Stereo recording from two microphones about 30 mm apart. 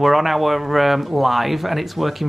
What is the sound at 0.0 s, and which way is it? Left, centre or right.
Speech, centre.